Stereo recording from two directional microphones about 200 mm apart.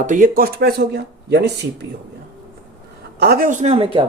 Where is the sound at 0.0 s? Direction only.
40° right (ahead or behind); by 1.5 s 55° right (ahead or behind).